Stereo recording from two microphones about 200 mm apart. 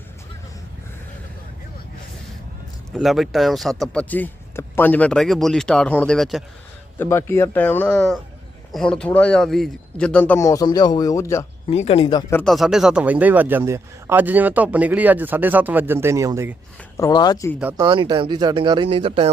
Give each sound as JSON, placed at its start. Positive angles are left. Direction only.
{"t": 2.9, "sound": "speech", "side_deg": 0}
{"t": 7.0, "sound": "speech", "side_deg": 10}
{"t": 11.7, "sound": "speech", "side_deg": 30}
{"t": 12.3, "sound": "speech", "side_deg": 5}
{"t": 17.0, "sound": "speech", "side_deg": 20}
{"t": 17.6, "sound": "speech", "side_deg": -10}
{"t": 17.8, "sound": "speech", "side_deg": -20}